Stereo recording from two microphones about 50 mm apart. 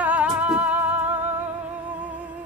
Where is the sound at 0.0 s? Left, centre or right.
Right.